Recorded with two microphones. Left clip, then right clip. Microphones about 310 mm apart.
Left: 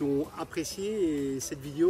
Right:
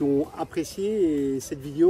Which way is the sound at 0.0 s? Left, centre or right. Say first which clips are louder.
Right 6 dB; centre.